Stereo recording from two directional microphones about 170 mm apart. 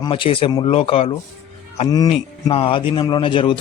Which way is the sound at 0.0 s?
30° left (ahead or behind).